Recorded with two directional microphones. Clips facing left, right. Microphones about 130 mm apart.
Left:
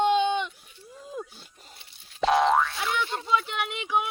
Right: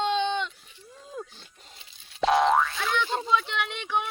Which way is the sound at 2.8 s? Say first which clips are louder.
Right 2 dB; 10° left (ahead or behind).